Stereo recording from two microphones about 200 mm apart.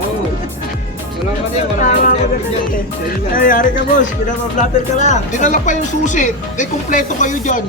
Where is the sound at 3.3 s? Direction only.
45° left (ahead or behind).